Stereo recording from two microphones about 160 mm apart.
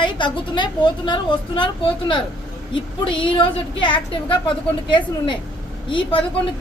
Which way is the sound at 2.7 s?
30° left (ahead or behind).